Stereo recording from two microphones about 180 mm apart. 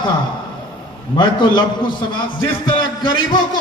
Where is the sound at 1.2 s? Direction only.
25° left (ahead or behind).